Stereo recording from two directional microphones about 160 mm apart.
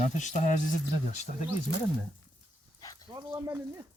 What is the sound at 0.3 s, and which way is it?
Speech, 50° left (ahead or behind).